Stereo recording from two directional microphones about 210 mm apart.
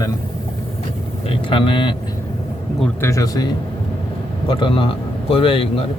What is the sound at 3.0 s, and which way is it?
Speech, 15° left (ahead or behind).